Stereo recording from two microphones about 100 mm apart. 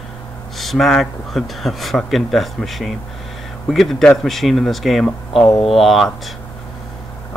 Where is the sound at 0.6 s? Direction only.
Centre (ahead or behind).